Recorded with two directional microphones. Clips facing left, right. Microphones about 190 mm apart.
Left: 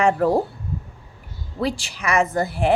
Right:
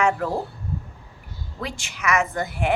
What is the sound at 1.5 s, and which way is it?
A woman's voice, 35° left (ahead or behind).